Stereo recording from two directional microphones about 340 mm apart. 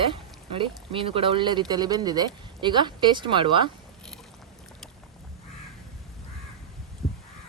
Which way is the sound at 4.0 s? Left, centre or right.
Centre.